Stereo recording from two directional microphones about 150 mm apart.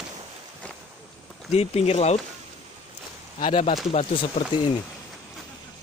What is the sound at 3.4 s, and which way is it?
Speech, 45° left (ahead or behind).